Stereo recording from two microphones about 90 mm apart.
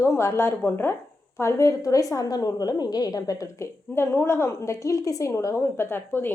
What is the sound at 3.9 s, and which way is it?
A woman's voice, 25° left (ahead or behind).